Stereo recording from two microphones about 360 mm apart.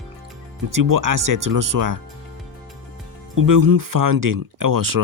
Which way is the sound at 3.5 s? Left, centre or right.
Right.